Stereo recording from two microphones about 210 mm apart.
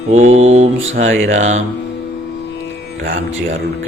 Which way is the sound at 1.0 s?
65° right (ahead or behind).